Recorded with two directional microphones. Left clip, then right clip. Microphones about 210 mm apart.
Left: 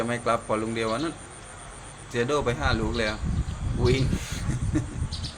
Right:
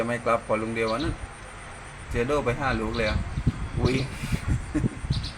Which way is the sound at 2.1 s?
5° right (ahead or behind).